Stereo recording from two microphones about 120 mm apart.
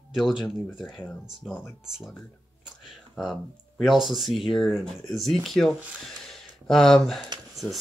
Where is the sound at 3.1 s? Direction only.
Centre (ahead or behind).